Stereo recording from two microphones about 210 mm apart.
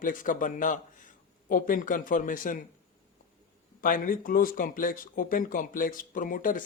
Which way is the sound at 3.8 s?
40° left (ahead or behind).